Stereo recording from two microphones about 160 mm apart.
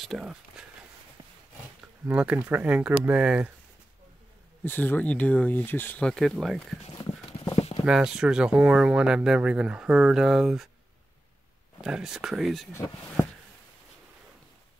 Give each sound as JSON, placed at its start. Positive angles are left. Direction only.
{"t": 0.0, "sound": "speech", "side_deg": -5}
{"t": 2.0, "sound": "speech", "side_deg": -10}
{"t": 4.6, "sound": "speech", "side_deg": 10}
{"t": 7.8, "sound": "speech", "side_deg": -5}
{"t": 11.8, "sound": "speech", "side_deg": -5}